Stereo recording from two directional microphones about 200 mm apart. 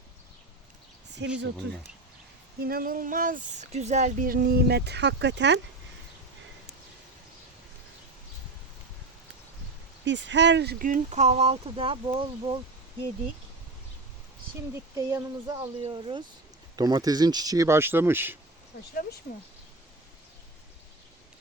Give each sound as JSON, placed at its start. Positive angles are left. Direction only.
{"t": 1.2, "sound": "speech", "side_deg": -60}
{"t": 2.6, "sound": "speech", "side_deg": -50}
{"t": 10.0, "sound": "speech", "side_deg": -65}
{"t": 14.9, "sound": "speech", "side_deg": -20}